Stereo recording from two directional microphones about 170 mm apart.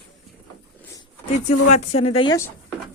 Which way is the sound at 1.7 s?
40° left (ahead or behind).